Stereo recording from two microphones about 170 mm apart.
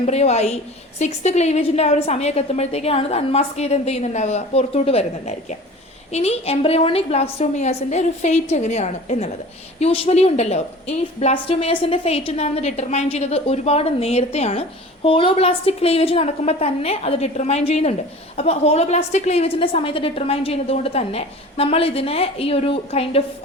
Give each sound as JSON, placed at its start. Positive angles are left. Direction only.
{"t": 0.0, "sound": "a woman's voice", "side_deg": 40}